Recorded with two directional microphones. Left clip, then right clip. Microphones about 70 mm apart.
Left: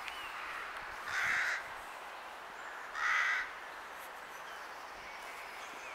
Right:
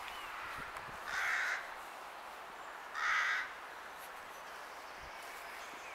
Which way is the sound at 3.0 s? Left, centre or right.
Centre.